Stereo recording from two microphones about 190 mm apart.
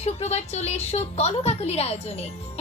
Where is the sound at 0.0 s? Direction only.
35° left (ahead or behind).